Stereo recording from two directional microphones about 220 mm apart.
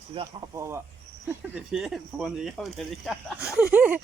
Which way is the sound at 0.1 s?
20° right (ahead or behind).